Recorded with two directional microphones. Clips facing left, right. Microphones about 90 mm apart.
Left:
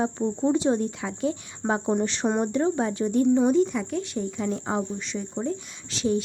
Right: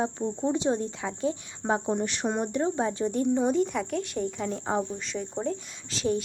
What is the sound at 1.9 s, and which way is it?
Speech, 5° left (ahead or behind).